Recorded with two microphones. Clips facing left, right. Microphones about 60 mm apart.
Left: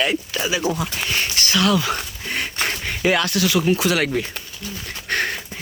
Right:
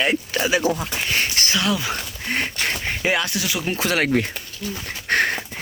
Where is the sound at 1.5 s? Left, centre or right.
Centre.